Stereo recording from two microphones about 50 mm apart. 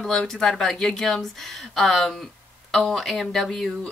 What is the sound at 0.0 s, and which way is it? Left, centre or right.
A woman's voice, centre.